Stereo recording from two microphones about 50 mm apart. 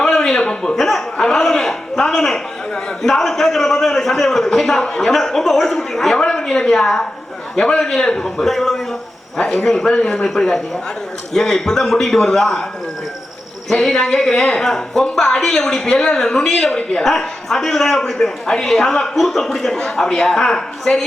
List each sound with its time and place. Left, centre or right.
0.0 s a sound: centre
1.2 s a man's voice: centre
9.4 s speech: centre
10.2 s a man's voice: centre
13.7 s a man's voice: centre
17.0 s a man's voice: centre